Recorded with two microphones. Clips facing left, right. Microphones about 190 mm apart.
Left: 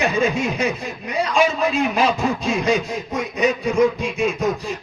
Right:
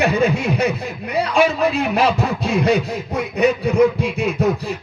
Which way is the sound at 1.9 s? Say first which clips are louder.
Right 1 dB; 65° right (ahead or behind).